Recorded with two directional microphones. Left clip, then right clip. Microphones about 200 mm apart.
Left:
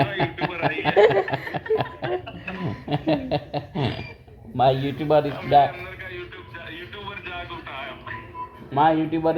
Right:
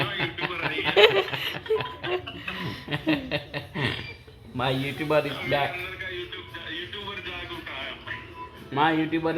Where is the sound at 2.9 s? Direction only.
45° left (ahead or behind).